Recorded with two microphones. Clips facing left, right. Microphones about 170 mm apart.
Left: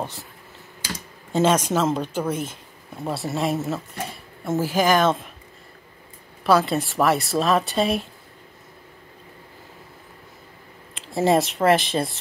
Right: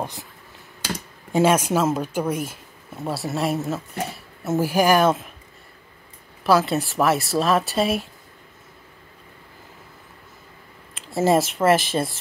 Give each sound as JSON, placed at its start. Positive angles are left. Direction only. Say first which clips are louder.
{"t": 1.3, "sound": "speech", "louder": "right 1 dB", "side_deg": -10}
{"t": 4.5, "sound": "speech", "louder": "right 2 dB", "side_deg": -10}
{"t": 6.4, "sound": "speech", "louder": "even", "side_deg": 0}
{"t": 11.0, "sound": "speech", "louder": "even", "side_deg": 0}